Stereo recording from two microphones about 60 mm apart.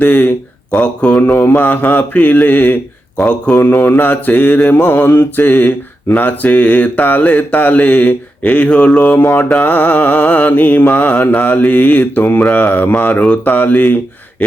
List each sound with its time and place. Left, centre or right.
0.0 s speech: left
1.3 s mantra: left
3.2 s speech: centre
3.6 s mantra: left
9.1 s mantra: left